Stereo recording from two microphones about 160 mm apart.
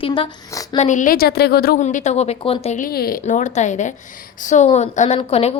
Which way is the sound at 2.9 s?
70° left (ahead or behind).